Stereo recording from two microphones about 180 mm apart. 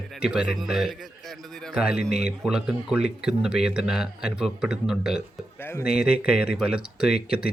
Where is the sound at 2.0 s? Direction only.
40° right (ahead or behind).